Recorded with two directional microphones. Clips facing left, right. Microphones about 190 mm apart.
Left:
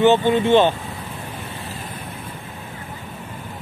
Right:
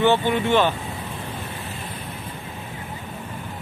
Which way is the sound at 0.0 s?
20° left (ahead or behind).